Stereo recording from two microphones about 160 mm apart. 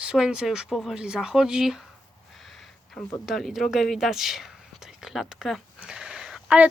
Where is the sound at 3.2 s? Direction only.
Centre (ahead or behind).